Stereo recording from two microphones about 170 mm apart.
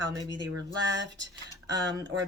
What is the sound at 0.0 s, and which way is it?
Speech, 25° right (ahead or behind).